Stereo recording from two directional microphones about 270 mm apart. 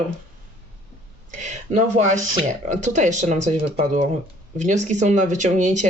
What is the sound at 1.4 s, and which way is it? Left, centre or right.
Speech, right.